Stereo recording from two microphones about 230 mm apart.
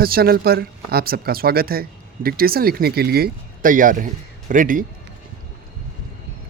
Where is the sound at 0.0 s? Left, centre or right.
Right.